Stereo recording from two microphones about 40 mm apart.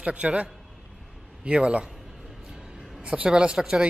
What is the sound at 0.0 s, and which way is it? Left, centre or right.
A woman's voice, right.